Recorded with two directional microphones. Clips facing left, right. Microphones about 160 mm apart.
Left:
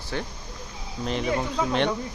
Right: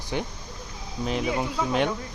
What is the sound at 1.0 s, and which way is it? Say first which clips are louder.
Speech: even; 5° right (ahead or behind).